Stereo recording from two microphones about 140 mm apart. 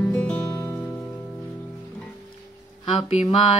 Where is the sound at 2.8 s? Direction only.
45° left (ahead or behind).